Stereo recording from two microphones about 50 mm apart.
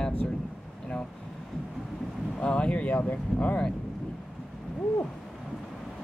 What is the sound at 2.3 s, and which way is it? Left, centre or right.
Speech, left.